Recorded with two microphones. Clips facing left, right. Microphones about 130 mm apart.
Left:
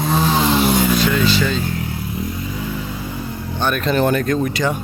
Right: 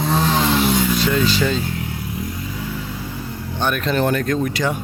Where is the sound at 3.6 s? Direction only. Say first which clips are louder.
Left 1 dB; 15° right (ahead or behind).